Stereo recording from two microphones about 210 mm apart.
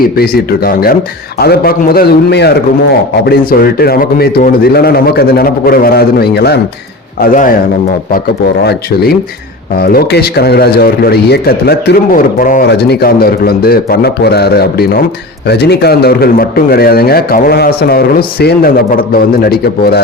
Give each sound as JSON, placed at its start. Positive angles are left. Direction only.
{"t": 0.0, "sound": "speech", "side_deg": 45}
{"t": 9.8, "sound": "speech", "side_deg": 50}